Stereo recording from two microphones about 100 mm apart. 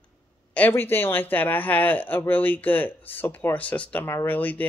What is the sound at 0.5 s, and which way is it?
Speech, 20° left (ahead or behind).